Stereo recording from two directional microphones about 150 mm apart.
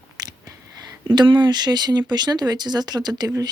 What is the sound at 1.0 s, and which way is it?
Speech, 30° right (ahead or behind).